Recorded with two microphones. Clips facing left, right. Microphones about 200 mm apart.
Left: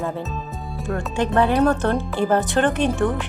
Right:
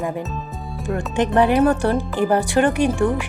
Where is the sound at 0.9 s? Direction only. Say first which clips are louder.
Right 2 dB; 20° right (ahead or behind).